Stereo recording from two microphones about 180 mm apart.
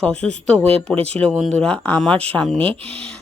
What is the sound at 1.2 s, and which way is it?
Speech, 5° left (ahead or behind).